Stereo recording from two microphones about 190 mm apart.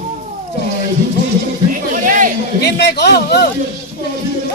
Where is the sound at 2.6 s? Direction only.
60° left (ahead or behind).